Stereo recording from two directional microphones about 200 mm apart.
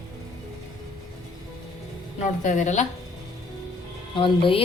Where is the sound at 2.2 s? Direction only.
40° left (ahead or behind).